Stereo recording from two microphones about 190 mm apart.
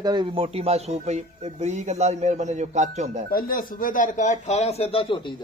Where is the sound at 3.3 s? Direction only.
50° left (ahead or behind); by 5.1 s 30° left (ahead or behind).